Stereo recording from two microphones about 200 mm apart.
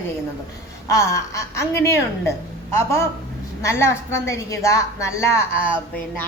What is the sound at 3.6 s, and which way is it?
A woman's voice, 15° left (ahead or behind).